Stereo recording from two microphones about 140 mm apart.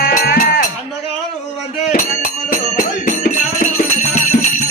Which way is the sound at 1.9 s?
70° left (ahead or behind).